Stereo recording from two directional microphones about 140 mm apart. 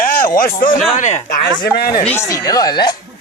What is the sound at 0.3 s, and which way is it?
Speech, 90° left.